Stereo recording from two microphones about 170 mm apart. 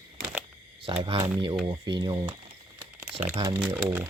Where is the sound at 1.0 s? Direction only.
30° right (ahead or behind).